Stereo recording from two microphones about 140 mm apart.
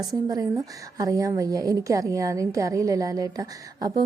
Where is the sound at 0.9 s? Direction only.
25° right (ahead or behind).